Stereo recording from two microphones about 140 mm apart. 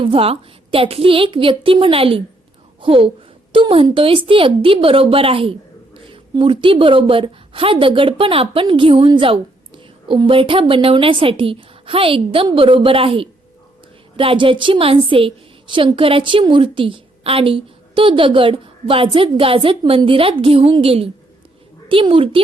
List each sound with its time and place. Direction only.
0.0 s speech: 40° right (ahead or behind)